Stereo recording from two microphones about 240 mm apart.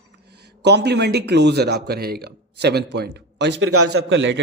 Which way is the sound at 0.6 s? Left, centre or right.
Right.